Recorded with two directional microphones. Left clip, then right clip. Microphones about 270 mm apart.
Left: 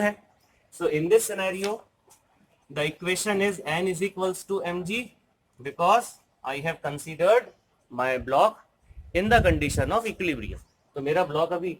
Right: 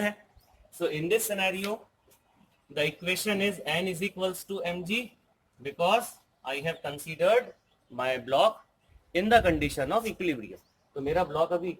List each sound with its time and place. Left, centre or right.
0.8 s speech: centre
2.7 s a man's voice: left; by 11.6 s centre